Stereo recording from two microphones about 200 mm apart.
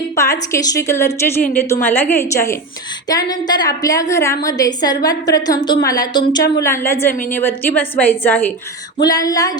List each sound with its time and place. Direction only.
0.2 s a woman's voice: 15° left (ahead or behind)